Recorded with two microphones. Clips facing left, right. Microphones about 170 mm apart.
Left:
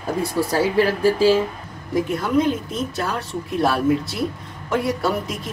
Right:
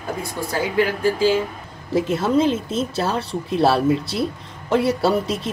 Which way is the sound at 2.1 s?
30° right (ahead or behind).